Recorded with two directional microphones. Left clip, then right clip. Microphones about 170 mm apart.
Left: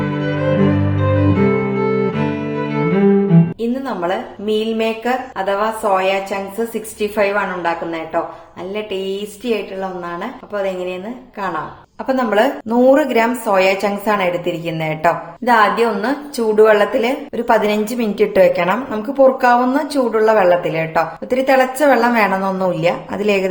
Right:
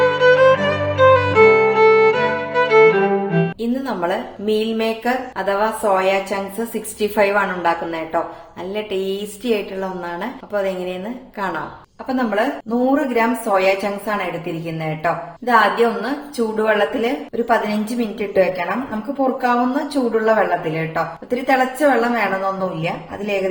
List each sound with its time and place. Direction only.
0.0 s music: centre (ahead or behind)
8.7 s a woman's voice: centre (ahead or behind)
12.0 s speech: 45° left (ahead or behind)